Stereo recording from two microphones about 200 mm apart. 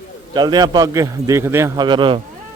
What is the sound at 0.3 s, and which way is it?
A man's voice, 20° right (ahead or behind).